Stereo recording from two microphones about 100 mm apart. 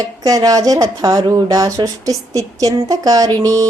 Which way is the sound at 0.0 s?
40° right (ahead or behind).